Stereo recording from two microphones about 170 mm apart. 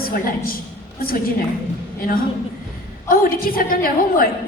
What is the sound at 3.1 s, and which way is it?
A woman's voice, 60° left (ahead or behind).